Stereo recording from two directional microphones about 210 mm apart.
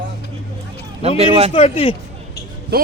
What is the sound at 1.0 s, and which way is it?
Speech, 30° right (ahead or behind).